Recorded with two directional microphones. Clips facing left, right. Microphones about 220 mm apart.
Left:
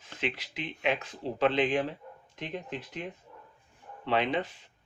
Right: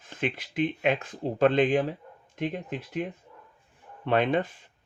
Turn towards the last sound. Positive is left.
turn(degrees=-50)  # may be behind; listen again after turning